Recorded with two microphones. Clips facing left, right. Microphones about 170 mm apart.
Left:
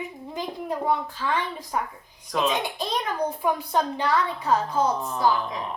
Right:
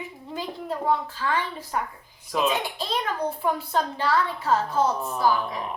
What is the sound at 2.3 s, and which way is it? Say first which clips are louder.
Speech: even; 5° right (ahead or behind).